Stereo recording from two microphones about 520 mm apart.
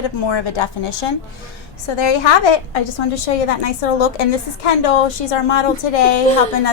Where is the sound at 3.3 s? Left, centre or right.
Left.